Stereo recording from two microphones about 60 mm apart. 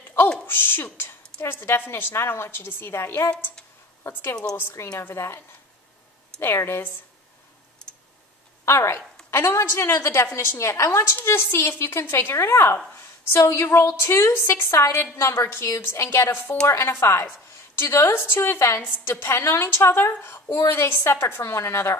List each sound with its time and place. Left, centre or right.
0.5 s a woman's voice: left
4.6 s a woman's voice: left
4.9 s a woman's voice: left
6.4 s a woman's voice: left
8.6 s a woman's voice: left
9.9 s a woman's voice: left
10.9 s a woman's voice: left